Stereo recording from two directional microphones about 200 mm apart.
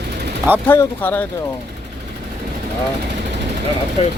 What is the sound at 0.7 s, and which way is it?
Speech, 10° left (ahead or behind).